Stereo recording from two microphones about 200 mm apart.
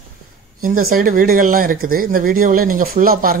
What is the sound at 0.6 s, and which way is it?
Speech, 45° right (ahead or behind).